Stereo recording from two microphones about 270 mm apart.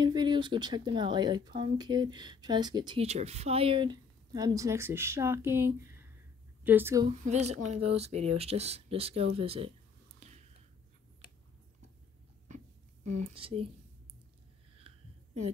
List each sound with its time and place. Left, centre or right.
0.0 s speech: centre
7.1 s speech: right
10.2 s a sound: right
13.2 s speech: right